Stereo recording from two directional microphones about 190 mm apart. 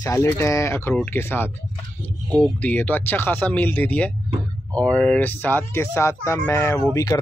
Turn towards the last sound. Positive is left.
turn(degrees=15)  # may be behind; listen again after turning